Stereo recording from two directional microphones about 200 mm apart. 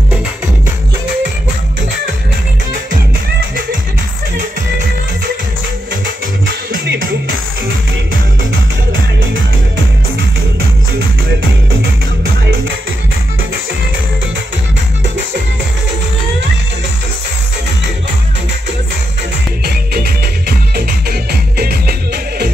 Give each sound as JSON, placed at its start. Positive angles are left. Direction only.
{"t": 6.7, "sound": "music", "side_deg": -50}
{"t": 19.6, "sound": "music", "side_deg": -50}